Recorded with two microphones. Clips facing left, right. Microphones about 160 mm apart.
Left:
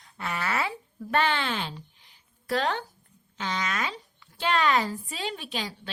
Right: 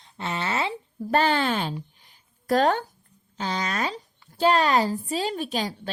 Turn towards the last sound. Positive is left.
turn(degrees=-45)  # may be behind; listen again after turning